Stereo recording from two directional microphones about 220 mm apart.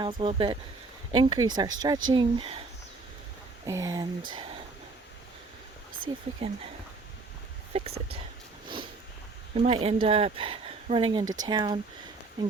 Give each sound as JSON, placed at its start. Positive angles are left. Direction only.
{"t": 0.0, "sound": "speech", "side_deg": -25}
{"t": 3.7, "sound": "speech", "side_deg": -15}
{"t": 6.4, "sound": "speech", "side_deg": -25}
{"t": 7.7, "sound": "speech", "side_deg": -30}
{"t": 8.6, "sound": "a sound", "side_deg": -20}
{"t": 9.6, "sound": "speech", "side_deg": -25}